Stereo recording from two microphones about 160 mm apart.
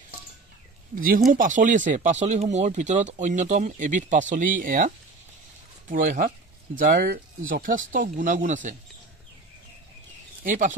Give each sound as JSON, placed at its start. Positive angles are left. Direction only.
{"t": 1.3, "sound": "speech", "side_deg": -55}
{"t": 10.4, "sound": "speech", "side_deg": -55}